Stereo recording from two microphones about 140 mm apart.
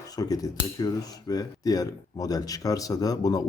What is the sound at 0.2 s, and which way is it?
Speech, 25° left (ahead or behind).